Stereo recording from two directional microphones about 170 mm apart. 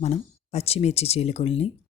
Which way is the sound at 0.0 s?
40° left (ahead or behind).